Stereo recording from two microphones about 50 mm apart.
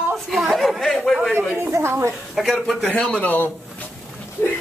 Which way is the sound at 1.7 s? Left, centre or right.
Right.